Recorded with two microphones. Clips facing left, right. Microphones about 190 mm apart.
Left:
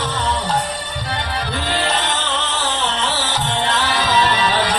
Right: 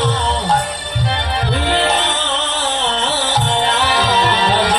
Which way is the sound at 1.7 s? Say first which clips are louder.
Right 4 dB; 65° right (ahead or behind).